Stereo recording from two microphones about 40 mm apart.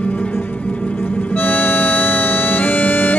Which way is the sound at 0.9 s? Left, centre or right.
Left.